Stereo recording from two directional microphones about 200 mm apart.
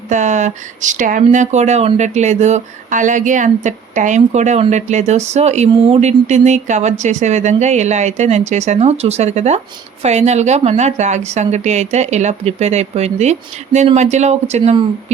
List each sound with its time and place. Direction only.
0.1 s speech: 35° right (ahead or behind)